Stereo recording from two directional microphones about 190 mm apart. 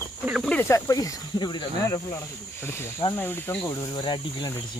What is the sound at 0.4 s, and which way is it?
Speech, 10° left (ahead or behind).